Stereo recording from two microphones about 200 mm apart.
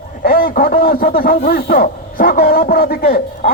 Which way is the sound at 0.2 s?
45° left (ahead or behind).